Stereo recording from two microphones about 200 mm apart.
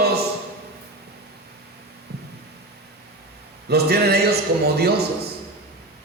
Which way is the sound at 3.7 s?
50° right (ahead or behind).